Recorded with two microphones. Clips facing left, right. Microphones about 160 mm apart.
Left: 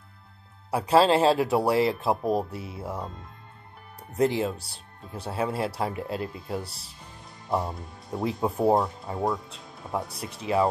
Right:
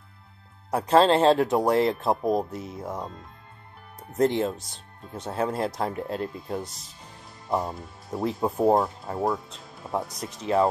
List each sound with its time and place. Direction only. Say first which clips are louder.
0.7 s speech: right 1 dB; 5° left (ahead or behind)
4.2 s speech: right 1 dB; 5° left (ahead or behind)
4.6 s speech: even; 35° left (ahead or behind)
5.3 s speech: right 1 dB; 5° left (ahead or behind)
6.6 s speech: right 2 dB; 30° left (ahead or behind)
7.4 s speech: right 1 dB; centre (ahead or behind)
10.0 s speech: right 1 dB; 30° left (ahead or behind)
10.4 s speech: right 2 dB; centre (ahead or behind)